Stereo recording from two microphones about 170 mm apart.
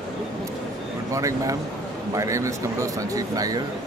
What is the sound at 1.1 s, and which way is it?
A man's voice, 20° right (ahead or behind).